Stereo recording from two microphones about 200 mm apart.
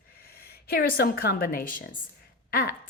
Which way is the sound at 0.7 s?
50° left (ahead or behind).